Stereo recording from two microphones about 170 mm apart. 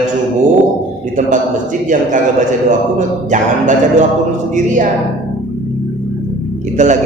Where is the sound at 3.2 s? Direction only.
45° right (ahead or behind).